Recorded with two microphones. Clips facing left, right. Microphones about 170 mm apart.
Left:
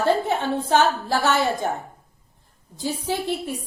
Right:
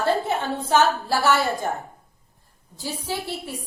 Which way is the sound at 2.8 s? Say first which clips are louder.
Left 4 dB; 15° left (ahead or behind).